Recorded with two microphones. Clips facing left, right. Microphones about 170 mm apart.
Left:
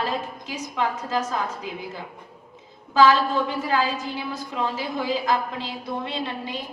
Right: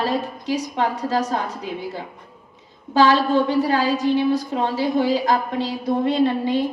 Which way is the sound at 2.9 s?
35° right (ahead or behind).